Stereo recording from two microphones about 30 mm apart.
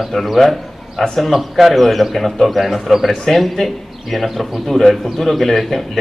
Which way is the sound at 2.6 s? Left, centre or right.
Centre.